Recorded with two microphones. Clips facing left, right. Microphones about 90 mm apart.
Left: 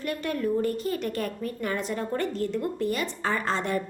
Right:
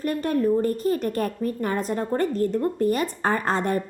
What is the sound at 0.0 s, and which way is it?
A woman's voice, 40° right (ahead or behind).